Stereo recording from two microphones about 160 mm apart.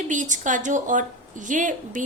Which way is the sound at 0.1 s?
50° right (ahead or behind).